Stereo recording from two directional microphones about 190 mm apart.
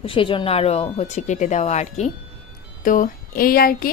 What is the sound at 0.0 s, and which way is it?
Speech, 30° left (ahead or behind).